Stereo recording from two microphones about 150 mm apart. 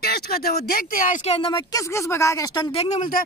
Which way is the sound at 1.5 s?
25° left (ahead or behind).